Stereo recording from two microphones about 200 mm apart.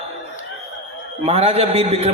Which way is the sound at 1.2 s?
30° right (ahead or behind).